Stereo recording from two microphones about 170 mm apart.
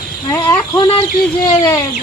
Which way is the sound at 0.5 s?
30° left (ahead or behind).